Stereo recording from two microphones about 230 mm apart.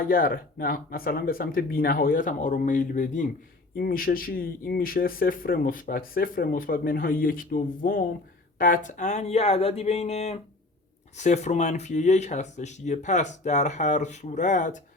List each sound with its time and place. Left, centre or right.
0.0 s speech: left